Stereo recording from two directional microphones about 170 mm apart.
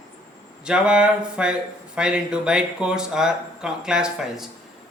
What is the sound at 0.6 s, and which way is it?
Speech, 5° right (ahead or behind).